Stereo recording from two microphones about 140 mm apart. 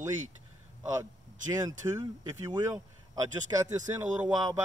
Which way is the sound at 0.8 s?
20° right (ahead or behind).